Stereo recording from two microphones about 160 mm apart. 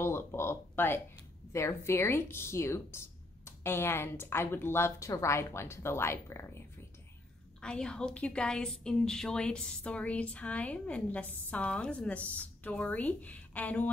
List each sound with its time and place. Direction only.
0.0 s a sound: 15° left (ahead or behind)
1.5 s a woman's voice: 15° left (ahead or behind)
7.6 s a woman's voice: 5° left (ahead or behind)